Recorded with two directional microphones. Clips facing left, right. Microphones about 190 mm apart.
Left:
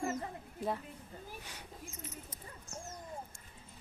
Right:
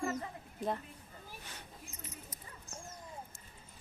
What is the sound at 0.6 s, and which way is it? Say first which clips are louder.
Speech: even; 5° left (ahead or behind).